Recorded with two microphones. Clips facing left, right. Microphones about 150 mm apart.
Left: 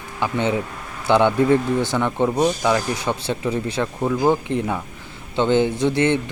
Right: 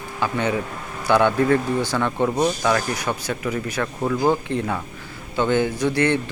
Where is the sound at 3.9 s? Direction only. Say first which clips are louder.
Left 1 dB; 10° left (ahead or behind).